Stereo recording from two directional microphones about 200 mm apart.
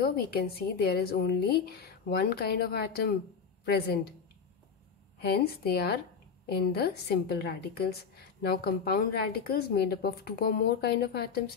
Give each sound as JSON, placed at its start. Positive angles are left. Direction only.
{"t": 0.0, "sound": "a woman's voice", "side_deg": 50}
{"t": 5.2, "sound": "a woman's voice", "side_deg": 55}